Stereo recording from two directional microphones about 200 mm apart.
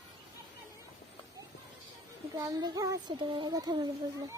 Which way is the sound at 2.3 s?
20° right (ahead or behind).